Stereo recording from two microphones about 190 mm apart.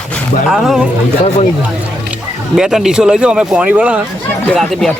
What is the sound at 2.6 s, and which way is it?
Speech, 5° right (ahead or behind).